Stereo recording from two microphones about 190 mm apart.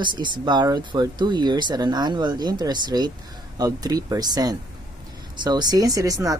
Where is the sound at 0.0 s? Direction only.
25° right (ahead or behind).